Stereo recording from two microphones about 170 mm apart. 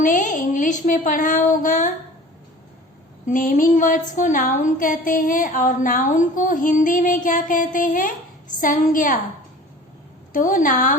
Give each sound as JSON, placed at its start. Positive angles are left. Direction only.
{"t": 0.0, "sound": "a woman's voice", "side_deg": 50}
{"t": 3.2, "sound": "a woman's voice", "side_deg": 50}
{"t": 10.3, "sound": "a woman's voice", "side_deg": 50}